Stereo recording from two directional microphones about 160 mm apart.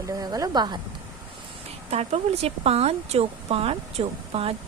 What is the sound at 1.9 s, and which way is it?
Speech, 40° right (ahead or behind).